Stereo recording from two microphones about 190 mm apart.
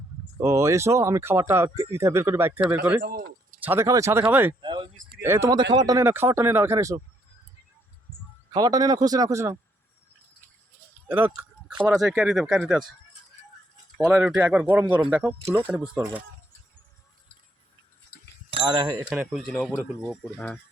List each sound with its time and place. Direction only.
0.3 s speech: 15° right (ahead or behind)
3.0 s a sound: 50° right (ahead or behind)
3.6 s speech: 10° right (ahead or behind)
4.6 s a sound: 25° right (ahead or behind)
5.2 s speech: 15° right (ahead or behind)
8.5 s a man's voice: 20° right (ahead or behind)
11.9 s speech: centre (ahead or behind)
14.0 s speech: 5° right (ahead or behind)
18.5 s a man's voice: 25° right (ahead or behind)
19.1 s speech: centre (ahead or behind)